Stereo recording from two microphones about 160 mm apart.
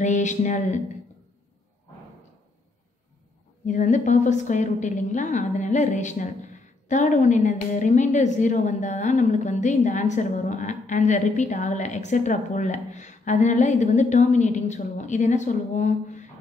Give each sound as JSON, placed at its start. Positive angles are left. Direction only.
{"t": 0.0, "sound": "a woman's voice", "side_deg": 50}
{"t": 3.6, "sound": "a woman's voice", "side_deg": 50}